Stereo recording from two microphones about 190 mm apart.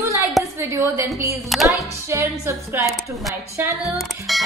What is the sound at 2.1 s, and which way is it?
Speech, 15° right (ahead or behind).